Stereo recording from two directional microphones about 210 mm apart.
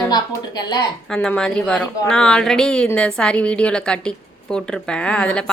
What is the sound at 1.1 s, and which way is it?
A woman's voice, 5° left (ahead or behind).